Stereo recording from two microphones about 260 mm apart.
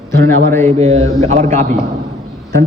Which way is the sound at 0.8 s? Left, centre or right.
Right.